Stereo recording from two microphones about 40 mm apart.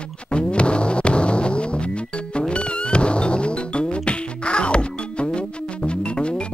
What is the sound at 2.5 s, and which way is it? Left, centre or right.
Music, left.